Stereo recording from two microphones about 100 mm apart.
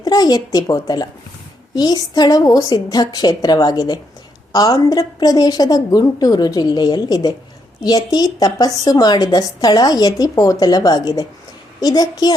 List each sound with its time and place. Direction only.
0.0 s a woman's voice: 40° left (ahead or behind)